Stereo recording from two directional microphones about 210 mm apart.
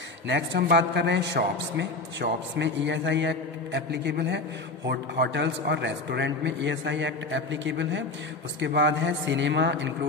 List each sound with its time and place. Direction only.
0.3 s a man's voice: 55° right (ahead or behind)